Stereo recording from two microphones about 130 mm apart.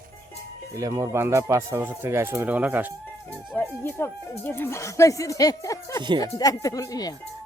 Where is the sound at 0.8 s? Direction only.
25° right (ahead or behind).